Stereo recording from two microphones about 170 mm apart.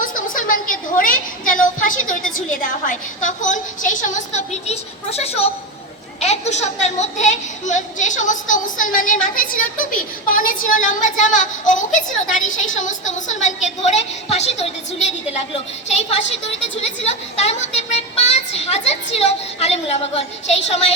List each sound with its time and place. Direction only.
0.0 s a woman's voice: 50° left (ahead or behind)
16.8 s speech: 40° left (ahead or behind)